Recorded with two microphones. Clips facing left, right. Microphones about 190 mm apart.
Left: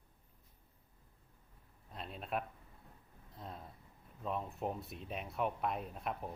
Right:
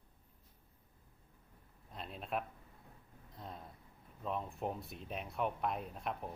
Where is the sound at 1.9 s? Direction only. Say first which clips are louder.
Even; centre (ahead or behind).